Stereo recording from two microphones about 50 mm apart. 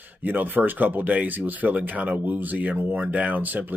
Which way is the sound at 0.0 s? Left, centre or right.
Right.